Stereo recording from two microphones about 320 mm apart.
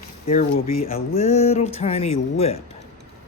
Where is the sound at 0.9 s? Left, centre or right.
Centre.